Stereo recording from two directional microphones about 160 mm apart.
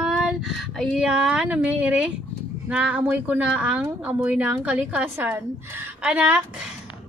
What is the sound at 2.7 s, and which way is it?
A woman's voice, 10° right (ahead or behind).